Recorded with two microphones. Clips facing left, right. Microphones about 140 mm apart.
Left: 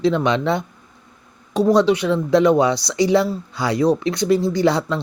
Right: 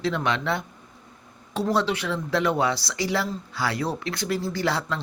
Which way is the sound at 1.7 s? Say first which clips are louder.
Left 9 dB; 15° left (ahead or behind).